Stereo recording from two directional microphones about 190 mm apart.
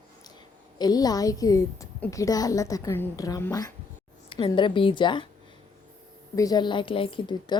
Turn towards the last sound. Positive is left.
turn(degrees=25)  # may be behind; listen again after turning